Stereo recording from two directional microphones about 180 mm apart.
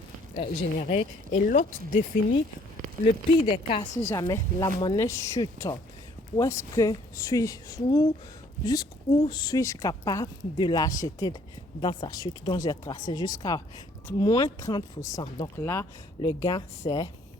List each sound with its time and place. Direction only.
0.3 s speech: 35° left (ahead or behind)
3.4 s speech: 30° left (ahead or behind)
4.0 s speech: 15° left (ahead or behind)